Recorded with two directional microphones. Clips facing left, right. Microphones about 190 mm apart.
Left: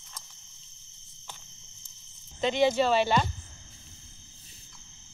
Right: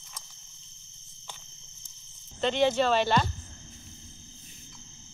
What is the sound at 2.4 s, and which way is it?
Speech, 10° left (ahead or behind).